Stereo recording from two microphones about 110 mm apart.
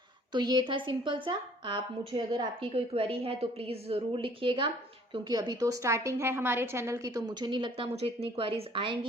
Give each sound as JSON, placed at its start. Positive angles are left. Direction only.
{"t": 0.3, "sound": "a woman's voice", "side_deg": -40}
{"t": 5.3, "sound": "a woman's voice", "side_deg": -35}
{"t": 7.9, "sound": "a woman's voice", "side_deg": -60}